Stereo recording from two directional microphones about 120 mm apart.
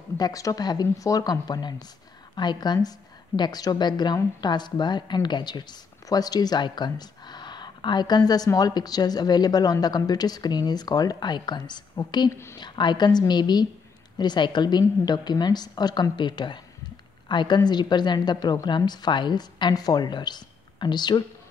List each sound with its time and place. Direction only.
0.2 s a woman's voice: 30° left (ahead or behind)